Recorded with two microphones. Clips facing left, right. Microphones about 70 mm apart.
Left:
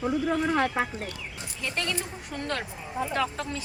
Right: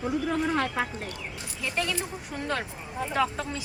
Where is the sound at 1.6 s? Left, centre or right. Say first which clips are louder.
Right 1 dB; centre.